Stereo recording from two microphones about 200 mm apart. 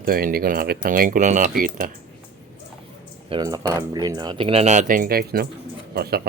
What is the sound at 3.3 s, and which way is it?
Speech, 20° right (ahead or behind).